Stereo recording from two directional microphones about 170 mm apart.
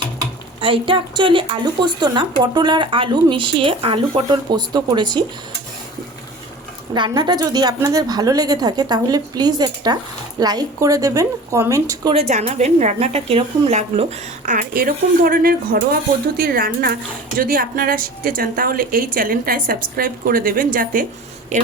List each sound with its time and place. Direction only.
0.6 s a woman's voice: 30° right (ahead or behind)
6.9 s a woman's voice: 25° right (ahead or behind)
12.1 s a woman's voice: 40° right (ahead or behind)